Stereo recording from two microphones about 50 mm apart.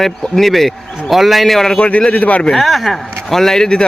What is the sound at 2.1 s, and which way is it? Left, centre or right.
Speech, left.